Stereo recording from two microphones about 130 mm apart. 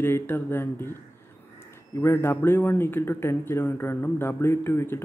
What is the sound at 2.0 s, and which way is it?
Speech, 20° left (ahead or behind).